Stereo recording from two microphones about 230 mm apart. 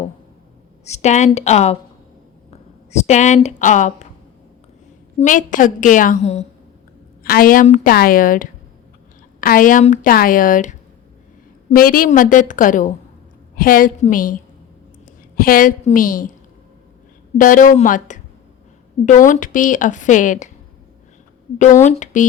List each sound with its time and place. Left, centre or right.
0.9 s a woman's voice: left
2.9 s a woman's voice: left
5.2 s a woman's voice: left
17.3 s a woman's voice: left
21.8 s a woman's voice: left